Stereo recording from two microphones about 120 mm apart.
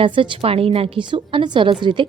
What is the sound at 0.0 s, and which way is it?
A woman's voice, 45° right (ahead or behind).